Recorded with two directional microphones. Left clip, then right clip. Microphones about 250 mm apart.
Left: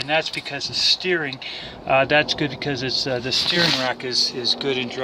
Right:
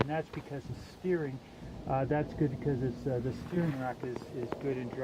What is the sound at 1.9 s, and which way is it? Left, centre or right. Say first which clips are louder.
Speech: left 15 dB; centre.